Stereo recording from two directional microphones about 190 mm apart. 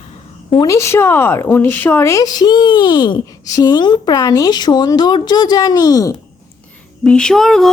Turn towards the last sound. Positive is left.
turn(degrees=0)  # may be behind; listen again after turning